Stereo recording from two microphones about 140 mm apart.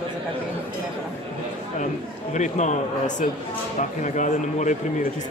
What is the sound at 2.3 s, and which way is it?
Speech, 60° left (ahead or behind).